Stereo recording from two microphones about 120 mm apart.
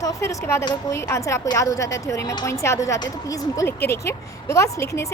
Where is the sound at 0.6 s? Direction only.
35° left (ahead or behind).